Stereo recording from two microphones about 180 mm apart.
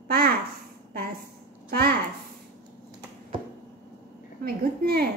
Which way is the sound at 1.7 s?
60° right (ahead or behind).